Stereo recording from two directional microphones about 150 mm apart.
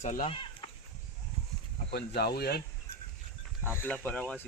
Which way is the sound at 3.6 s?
15° left (ahead or behind).